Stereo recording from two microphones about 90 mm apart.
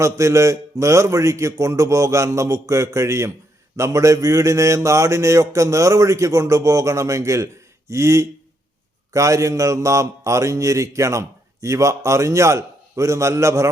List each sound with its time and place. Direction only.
0.0 s mantra: 35° right (ahead or behind)